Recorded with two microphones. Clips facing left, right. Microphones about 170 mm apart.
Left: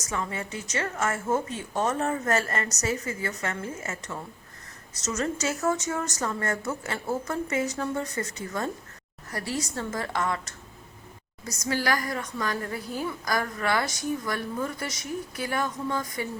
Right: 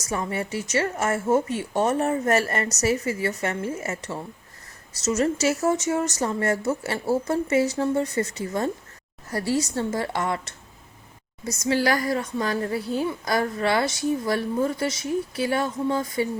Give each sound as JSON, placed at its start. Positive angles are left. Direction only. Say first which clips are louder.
{"t": 0.0, "sound": "a woman's voice", "louder": "right 4 dB", "side_deg": -30}